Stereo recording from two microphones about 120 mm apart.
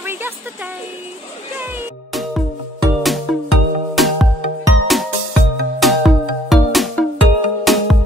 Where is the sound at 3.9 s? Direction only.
Centre (ahead or behind).